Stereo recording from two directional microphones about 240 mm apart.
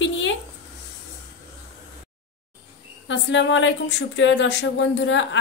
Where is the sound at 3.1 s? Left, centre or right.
Left.